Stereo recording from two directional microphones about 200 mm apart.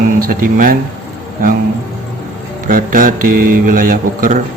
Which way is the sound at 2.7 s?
45° right (ahead or behind).